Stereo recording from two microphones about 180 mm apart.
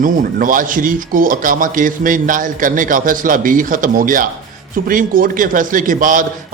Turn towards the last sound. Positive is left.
turn(degrees=-50)  # may be behind; listen again after turning